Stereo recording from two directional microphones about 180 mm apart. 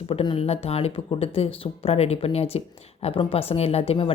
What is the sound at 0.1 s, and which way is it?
Speech, 30° left (ahead or behind).